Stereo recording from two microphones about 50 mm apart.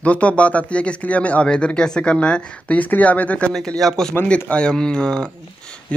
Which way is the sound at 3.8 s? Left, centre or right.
Centre.